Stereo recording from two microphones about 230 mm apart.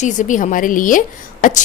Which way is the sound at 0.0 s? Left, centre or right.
Left.